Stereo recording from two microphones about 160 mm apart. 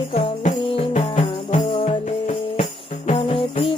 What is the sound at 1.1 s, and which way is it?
Music, 50° left (ahead or behind).